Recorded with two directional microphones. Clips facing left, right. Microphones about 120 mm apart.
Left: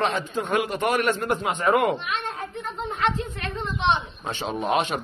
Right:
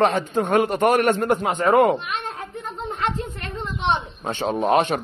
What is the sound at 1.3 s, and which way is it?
Speech, 30° right (ahead or behind).